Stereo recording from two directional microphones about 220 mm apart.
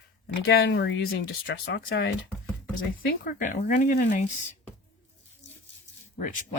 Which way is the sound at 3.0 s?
40° left (ahead or behind).